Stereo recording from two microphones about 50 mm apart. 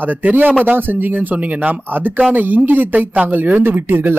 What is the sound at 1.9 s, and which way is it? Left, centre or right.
Speech, right.